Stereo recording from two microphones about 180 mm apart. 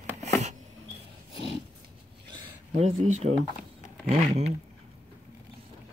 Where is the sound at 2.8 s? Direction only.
40° right (ahead or behind).